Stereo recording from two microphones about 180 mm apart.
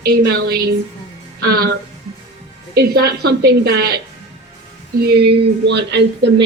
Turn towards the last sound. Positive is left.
turn(degrees=-70)  # may be behind; listen again after turning